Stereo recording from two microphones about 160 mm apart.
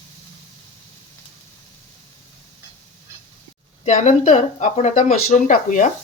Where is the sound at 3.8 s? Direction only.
45° left (ahead or behind).